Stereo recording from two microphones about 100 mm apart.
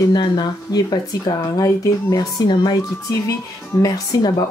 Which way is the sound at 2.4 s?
45° left (ahead or behind).